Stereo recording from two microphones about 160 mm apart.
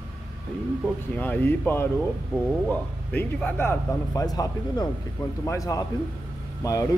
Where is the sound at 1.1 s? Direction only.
10° left (ahead or behind).